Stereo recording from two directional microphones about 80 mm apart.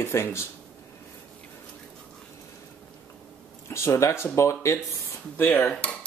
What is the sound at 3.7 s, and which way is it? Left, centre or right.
Speech, left.